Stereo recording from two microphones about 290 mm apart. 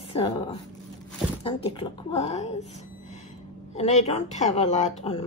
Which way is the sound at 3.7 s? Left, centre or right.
Left.